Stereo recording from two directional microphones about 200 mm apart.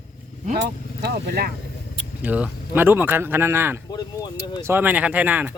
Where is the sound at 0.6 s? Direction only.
55° right (ahead or behind).